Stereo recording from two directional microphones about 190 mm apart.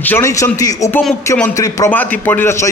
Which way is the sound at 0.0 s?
15° left (ahead or behind).